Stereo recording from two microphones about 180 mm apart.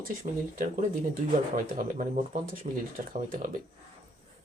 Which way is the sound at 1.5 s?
50° right (ahead or behind).